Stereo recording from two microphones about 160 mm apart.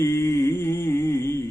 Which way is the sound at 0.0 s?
15° left (ahead or behind).